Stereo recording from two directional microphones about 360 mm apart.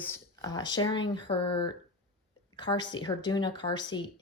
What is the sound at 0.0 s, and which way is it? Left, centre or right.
Speech, centre.